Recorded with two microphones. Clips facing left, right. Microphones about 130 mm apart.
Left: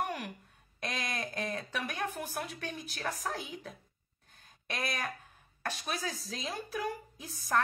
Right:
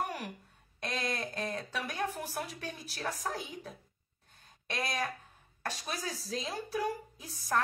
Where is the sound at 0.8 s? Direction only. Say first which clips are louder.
Right 1 dB; 30° right (ahead or behind).